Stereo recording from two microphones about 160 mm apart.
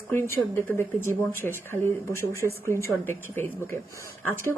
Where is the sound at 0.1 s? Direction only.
15° left (ahead or behind).